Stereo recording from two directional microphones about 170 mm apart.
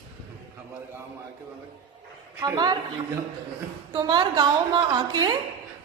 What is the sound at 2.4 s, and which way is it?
Speech, 25° right (ahead or behind).